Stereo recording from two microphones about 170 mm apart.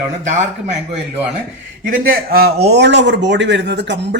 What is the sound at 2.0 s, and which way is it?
Speech, 60° right (ahead or behind).